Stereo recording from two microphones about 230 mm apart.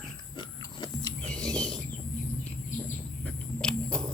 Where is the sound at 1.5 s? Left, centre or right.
Centre.